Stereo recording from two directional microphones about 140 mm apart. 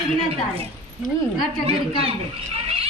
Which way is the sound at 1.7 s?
45° right (ahead or behind).